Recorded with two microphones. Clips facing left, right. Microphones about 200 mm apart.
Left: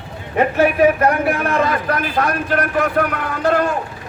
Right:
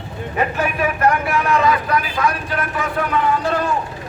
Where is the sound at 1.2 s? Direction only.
55° left (ahead or behind).